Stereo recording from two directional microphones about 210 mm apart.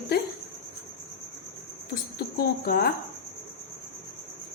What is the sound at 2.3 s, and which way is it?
Speech, 45° left (ahead or behind).